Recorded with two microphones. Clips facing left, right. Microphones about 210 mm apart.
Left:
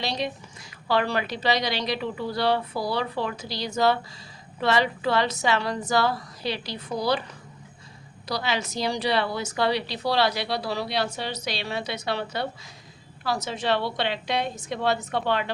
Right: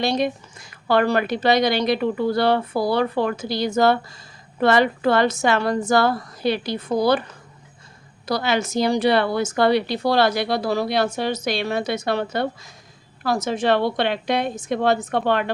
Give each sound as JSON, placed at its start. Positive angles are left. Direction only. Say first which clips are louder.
{"t": 0.0, "sound": "speech", "louder": "right 8 dB", "side_deg": -50}
{"t": 8.3, "sound": "speech", "louder": "right 6 dB", "side_deg": -50}